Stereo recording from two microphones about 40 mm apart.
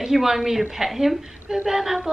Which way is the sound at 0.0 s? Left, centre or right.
Centre.